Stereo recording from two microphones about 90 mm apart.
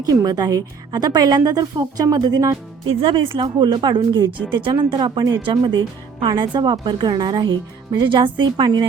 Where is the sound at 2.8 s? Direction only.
70° right (ahead or behind).